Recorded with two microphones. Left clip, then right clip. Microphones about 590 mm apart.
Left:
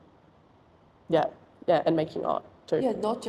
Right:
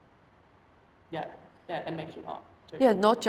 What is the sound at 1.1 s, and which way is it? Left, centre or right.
Speech, left.